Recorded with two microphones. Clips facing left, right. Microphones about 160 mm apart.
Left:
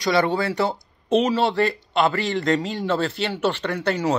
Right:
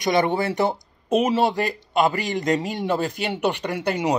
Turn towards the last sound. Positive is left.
turn(degrees=-15)  # may be behind; listen again after turning